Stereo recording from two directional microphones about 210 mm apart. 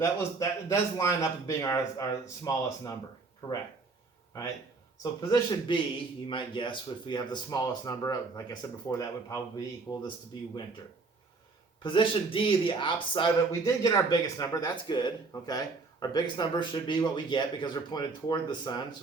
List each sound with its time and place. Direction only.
0.0 s speech: 15° left (ahead or behind)
5.2 s speech: 20° left (ahead or behind)
11.8 s speech: 25° left (ahead or behind)